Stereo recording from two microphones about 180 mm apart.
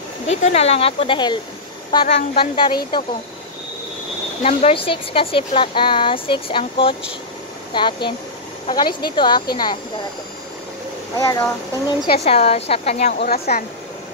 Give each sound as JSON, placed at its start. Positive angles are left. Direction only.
{"t": 0.3, "sound": "speech", "side_deg": 40}
{"t": 2.0, "sound": "speech", "side_deg": 40}
{"t": 4.4, "sound": "speech", "side_deg": 35}
{"t": 11.1, "sound": "speech", "side_deg": 15}
{"t": 12.1, "sound": "speech", "side_deg": 35}
{"t": 13.2, "sound": "speech", "side_deg": 60}